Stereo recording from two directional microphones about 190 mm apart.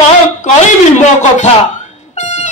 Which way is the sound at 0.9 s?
40° left (ahead or behind).